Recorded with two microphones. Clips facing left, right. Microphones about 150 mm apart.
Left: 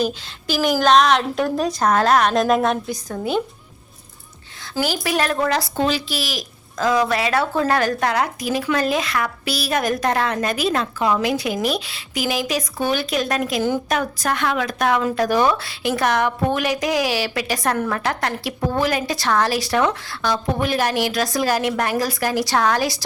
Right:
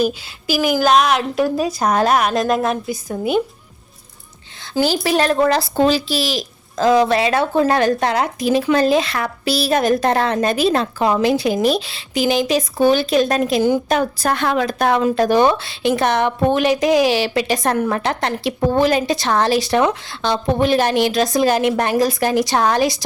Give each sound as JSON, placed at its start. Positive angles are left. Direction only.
{"t": 0.0, "sound": "a woman's voice", "side_deg": -10}
{"t": 2.3, "sound": "a woman's voice", "side_deg": 0}
{"t": 4.7, "sound": "a woman's voice", "side_deg": -30}